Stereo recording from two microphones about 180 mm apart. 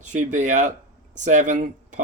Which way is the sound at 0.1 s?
45° right (ahead or behind).